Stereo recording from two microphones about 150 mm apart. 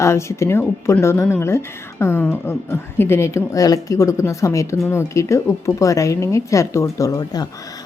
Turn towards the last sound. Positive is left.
turn(degrees=25)  # may be behind; listen again after turning